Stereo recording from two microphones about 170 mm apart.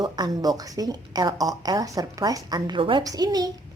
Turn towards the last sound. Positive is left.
turn(degrees=-25)  # may be behind; listen again after turning